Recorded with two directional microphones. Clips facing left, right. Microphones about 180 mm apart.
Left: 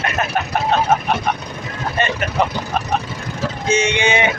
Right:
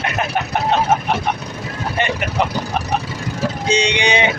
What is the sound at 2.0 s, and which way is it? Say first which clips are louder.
Vehicle: left 1 dB; 15° right (ahead or behind).